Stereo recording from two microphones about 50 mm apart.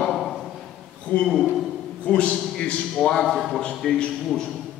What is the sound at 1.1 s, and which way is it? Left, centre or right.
Speech, left.